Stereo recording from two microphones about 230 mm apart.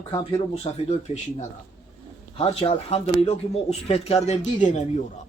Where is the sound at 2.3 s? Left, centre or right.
Left.